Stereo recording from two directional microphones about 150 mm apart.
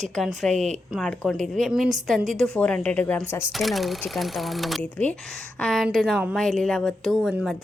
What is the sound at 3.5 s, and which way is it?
A woman's voice, centre (ahead or behind).